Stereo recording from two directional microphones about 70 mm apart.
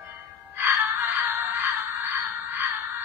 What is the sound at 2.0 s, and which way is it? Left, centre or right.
Music, right.